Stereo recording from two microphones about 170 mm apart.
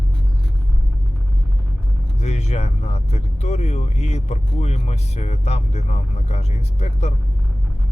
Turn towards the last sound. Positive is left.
turn(degrees=40)  # may be behind; listen again after turning